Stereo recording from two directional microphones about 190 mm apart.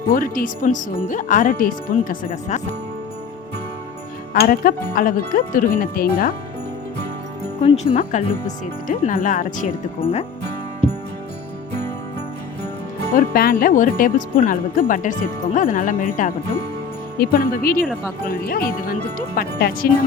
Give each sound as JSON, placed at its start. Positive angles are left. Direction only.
{"t": 0.1, "sound": "speech", "side_deg": 45}
{"t": 4.4, "sound": "speech", "side_deg": 45}
{"t": 7.9, "sound": "speech", "side_deg": 45}
{"t": 10.0, "sound": "speech", "side_deg": 30}
{"t": 13.1, "sound": "speech", "side_deg": 50}